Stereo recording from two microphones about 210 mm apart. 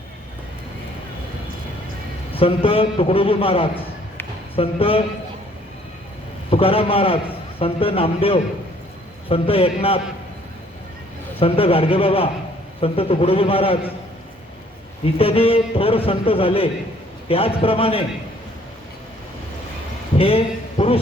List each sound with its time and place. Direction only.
2.3 s a man's voice: 25° left (ahead or behind)
6.5 s a man's voice: 25° left (ahead or behind)
11.3 s a man's voice: 25° left (ahead or behind)
15.0 s a man's voice: 25° left (ahead or behind)
20.1 s a man's voice: 25° left (ahead or behind)